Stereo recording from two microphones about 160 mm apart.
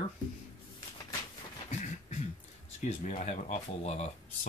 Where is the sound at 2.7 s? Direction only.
50° left (ahead or behind).